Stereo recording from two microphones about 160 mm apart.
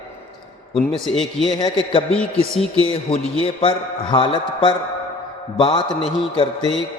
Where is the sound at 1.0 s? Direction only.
Centre (ahead or behind).